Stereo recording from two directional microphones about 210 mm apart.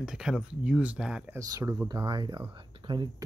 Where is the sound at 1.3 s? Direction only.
15° right (ahead or behind).